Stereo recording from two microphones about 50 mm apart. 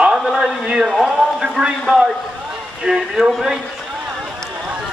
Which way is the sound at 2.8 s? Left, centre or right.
Centre.